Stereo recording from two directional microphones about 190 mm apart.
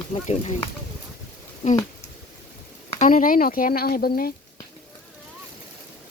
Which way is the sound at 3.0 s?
45° left (ahead or behind).